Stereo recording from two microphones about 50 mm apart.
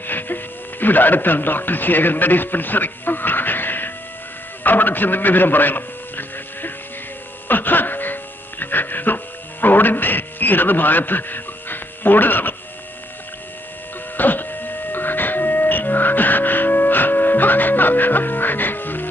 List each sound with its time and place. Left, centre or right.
0.0 s speech: left
4.6 s a sound: left
7.4 s music: left
14.1 s music: left